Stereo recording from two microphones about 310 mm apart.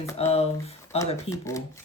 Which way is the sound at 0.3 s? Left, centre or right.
Centre.